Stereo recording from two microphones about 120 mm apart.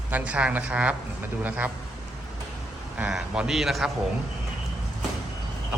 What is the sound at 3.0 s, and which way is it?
Speech, 5° right (ahead or behind).